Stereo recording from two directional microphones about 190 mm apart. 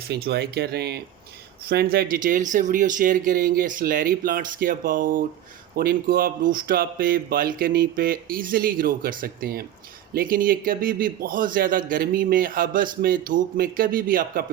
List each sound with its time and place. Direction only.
0.1 s a man's voice: 55° right (ahead or behind)